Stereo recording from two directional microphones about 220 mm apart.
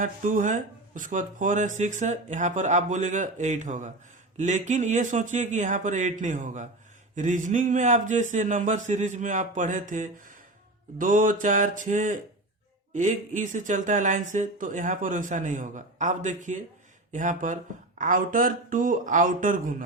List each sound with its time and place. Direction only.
0.0 s speech: 35° right (ahead or behind)